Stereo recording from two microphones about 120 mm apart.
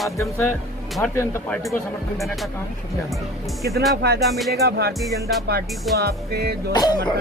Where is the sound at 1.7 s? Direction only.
Centre (ahead or behind).